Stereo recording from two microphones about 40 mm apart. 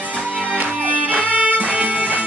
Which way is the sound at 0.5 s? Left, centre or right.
Right.